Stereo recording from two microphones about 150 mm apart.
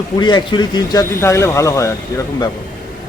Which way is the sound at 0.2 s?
30° left (ahead or behind).